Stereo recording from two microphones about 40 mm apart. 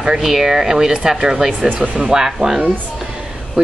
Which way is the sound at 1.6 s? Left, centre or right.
Right.